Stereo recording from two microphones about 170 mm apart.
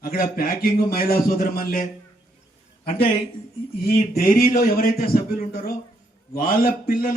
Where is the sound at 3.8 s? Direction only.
60° left (ahead or behind).